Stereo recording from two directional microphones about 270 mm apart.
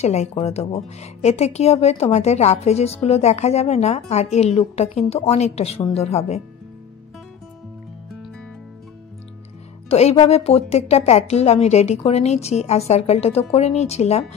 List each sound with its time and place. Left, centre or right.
0.0 s speech: left
9.8 s speech: left